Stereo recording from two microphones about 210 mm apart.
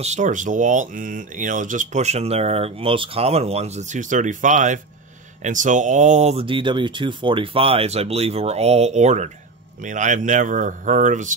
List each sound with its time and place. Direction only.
0.0 s speech: 35° right (ahead or behind)